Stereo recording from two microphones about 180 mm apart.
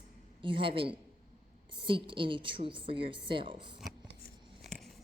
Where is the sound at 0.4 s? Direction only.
30° right (ahead or behind).